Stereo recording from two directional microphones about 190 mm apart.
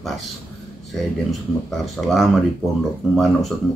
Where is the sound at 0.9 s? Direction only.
Centre (ahead or behind).